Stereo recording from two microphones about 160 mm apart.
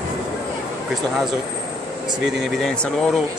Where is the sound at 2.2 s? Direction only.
Centre (ahead or behind).